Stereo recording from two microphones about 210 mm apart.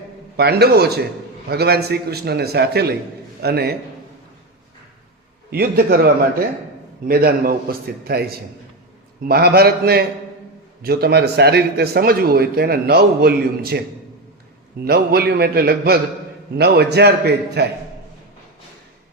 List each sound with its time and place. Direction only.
0.3 s a man's voice: 50° right (ahead or behind)
5.5 s a man's voice: 50° right (ahead or behind)
7.1 s a man's voice: 45° right (ahead or behind)
14.8 s a man's voice: 50° right (ahead or behind)